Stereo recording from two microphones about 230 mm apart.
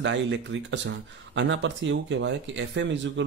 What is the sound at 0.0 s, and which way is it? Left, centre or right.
Speech, right.